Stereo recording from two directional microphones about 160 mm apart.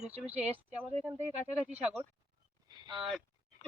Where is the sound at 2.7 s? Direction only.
25° right (ahead or behind).